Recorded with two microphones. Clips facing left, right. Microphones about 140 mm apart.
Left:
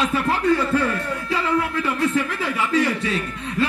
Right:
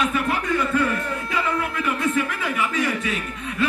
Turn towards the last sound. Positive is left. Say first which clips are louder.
# left 3 dB
turn(degrees=35)  # may be behind; listen again after turning